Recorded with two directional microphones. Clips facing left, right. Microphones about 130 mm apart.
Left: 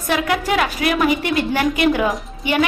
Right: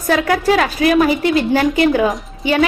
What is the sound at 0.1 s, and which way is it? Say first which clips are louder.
A woman's voice: right 5 dB; 35° right (ahead or behind).